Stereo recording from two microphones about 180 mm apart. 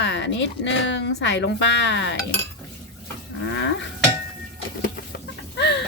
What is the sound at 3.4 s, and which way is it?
Cattle, 90° left.